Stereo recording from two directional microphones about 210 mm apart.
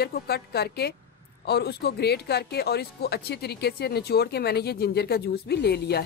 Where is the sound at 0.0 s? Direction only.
50° left (ahead or behind).